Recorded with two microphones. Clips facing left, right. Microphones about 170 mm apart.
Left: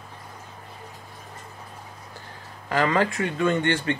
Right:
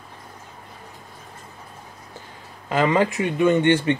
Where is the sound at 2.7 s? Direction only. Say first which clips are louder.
Right 3 dB; 20° right (ahead or behind).